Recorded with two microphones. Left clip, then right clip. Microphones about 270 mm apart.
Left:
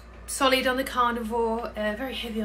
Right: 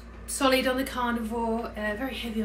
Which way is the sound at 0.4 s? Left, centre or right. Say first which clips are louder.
Left 1 dB; centre.